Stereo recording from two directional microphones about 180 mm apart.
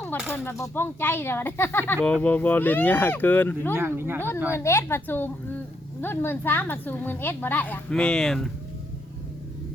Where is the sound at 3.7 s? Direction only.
10° right (ahead or behind).